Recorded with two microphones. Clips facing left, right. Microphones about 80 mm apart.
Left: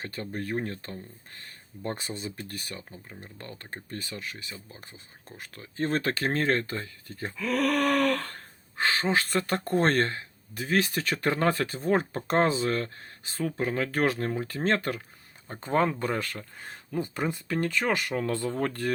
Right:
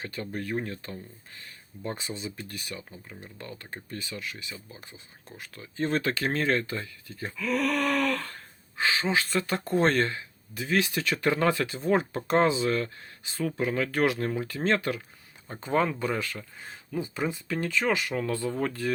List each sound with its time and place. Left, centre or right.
0.0 s speech: left
7.5 s speech: left
18.3 s speech: left
18.6 s speech: left